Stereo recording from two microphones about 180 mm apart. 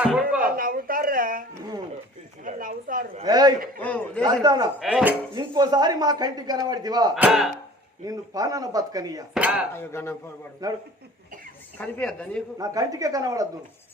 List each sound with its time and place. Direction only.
0.0 s a sound: 5° right (ahead or behind)
0.5 s a sound: 50° right (ahead or behind)
3.2 s speech: 20° right (ahead or behind)
3.8 s speech: 10° left (ahead or behind)
4.2 s speech: 20° right (ahead or behind)
4.8 s speech: 5° right (ahead or behind)
5.3 s speech: 25° right (ahead or behind)
7.2 s speech: centre (ahead or behind)
8.0 s speech: 20° right (ahead or behind)
9.3 s cutlery: 5° right (ahead or behind)
9.7 s speech: 15° left (ahead or behind)
10.6 s speech: 20° right (ahead or behind)
11.8 s speech: 5° left (ahead or behind)
12.5 s speech: 20° right (ahead or behind)